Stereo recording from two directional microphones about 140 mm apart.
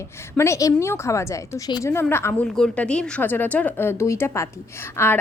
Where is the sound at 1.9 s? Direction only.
15° left (ahead or behind).